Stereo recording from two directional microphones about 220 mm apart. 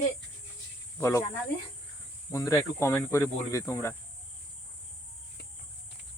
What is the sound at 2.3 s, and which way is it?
Speech, 15° left (ahead or behind).